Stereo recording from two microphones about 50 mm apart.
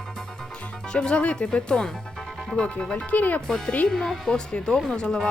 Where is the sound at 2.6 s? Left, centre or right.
Centre.